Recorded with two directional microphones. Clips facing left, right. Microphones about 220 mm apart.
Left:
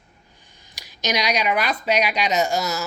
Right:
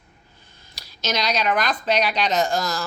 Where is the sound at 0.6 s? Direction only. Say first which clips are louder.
Left 1 dB; 15° left (ahead or behind).